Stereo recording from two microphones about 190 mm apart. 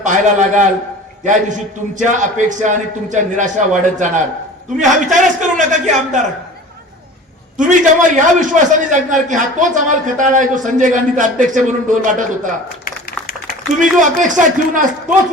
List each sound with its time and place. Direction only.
0.0 s a man's voice: 40° right (ahead or behind)
7.5 s a man's voice: 40° right (ahead or behind)
12.8 s a sound: 55° left (ahead or behind)
13.7 s a man's voice: 40° right (ahead or behind)